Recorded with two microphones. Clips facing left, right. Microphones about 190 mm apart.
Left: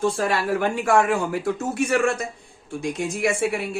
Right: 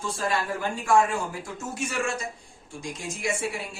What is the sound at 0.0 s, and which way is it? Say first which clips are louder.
Speech: left 6 dB; 75° left (ahead or behind).